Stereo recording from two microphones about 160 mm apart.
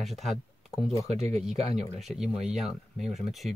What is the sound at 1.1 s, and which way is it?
Speech, 40° right (ahead or behind).